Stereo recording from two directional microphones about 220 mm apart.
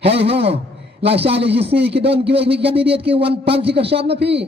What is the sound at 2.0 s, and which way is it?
Speech, 50° right (ahead or behind).